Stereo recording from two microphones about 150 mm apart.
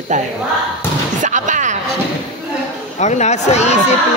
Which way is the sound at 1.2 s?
55° right (ahead or behind).